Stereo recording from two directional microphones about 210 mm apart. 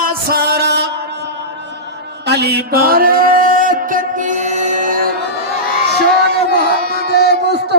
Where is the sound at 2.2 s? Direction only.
50° right (ahead or behind).